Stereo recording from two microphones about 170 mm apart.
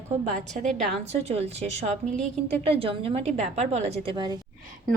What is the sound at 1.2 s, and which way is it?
A woman's voice, 35° right (ahead or behind).